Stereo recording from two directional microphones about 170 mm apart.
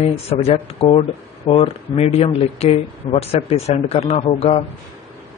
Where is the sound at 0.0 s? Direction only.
40° left (ahead or behind).